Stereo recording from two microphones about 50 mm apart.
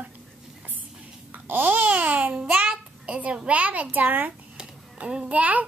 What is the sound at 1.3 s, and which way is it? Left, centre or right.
Babbling, right.